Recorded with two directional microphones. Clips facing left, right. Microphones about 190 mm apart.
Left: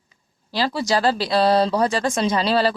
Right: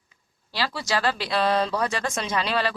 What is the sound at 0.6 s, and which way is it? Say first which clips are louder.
Speech: left 6 dB; 40° left (ahead or behind).